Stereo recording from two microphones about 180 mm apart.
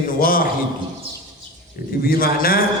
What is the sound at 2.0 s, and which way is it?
Speech, 55° left (ahead or behind).